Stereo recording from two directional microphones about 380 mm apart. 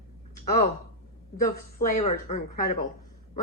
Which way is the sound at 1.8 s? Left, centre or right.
Centre.